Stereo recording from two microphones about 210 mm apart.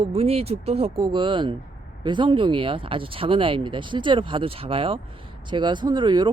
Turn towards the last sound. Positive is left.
turn(degrees=-20)  # may be behind; listen again after turning